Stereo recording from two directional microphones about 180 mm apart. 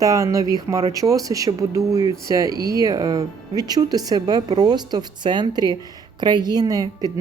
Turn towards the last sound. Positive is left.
turn(degrees=-20)  # may be behind; listen again after turning